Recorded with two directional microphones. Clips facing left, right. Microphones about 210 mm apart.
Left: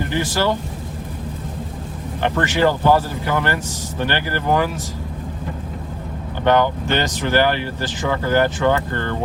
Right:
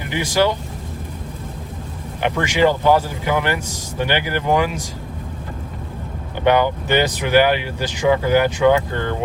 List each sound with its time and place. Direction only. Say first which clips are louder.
0.0 s speech: right 2 dB; 15° right (ahead or behind)
2.2 s speech: right 1 dB; 15° right (ahead or behind)
6.4 s speech: even; 10° right (ahead or behind)